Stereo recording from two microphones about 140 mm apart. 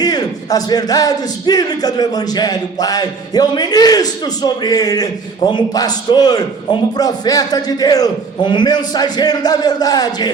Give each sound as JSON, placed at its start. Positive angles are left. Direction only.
{"t": 0.0, "sound": "speech", "side_deg": 30}